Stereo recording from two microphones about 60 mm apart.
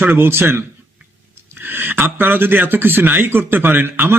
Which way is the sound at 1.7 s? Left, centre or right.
Right.